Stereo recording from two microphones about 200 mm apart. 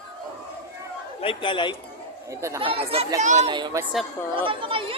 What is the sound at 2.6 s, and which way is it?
Speech, 25° right (ahead or behind).